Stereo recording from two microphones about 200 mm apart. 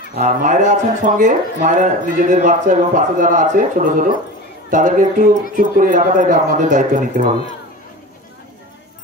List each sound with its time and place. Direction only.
0.1 s speech: 35° right (ahead or behind)